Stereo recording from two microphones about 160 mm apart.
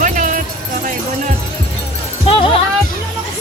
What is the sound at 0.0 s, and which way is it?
Music, 55° right (ahead or behind).